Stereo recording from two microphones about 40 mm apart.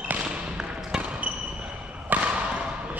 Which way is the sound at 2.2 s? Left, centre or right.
Right.